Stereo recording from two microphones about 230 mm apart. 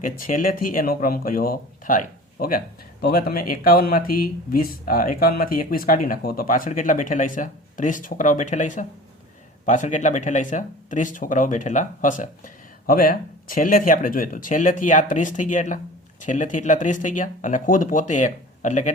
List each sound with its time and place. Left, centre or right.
0.0 s speech: left